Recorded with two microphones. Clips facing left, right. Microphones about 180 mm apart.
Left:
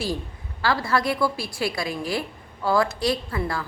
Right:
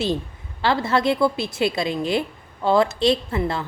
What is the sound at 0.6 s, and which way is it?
A woman's voice, 25° right (ahead or behind).